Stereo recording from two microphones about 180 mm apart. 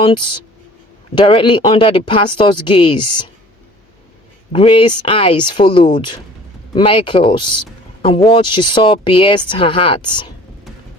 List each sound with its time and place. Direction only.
0.0 s speech: 30° left (ahead or behind)
4.5 s speech: 30° left (ahead or behind)